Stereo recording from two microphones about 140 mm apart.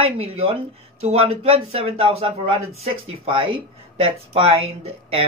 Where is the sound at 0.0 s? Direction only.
45° right (ahead or behind).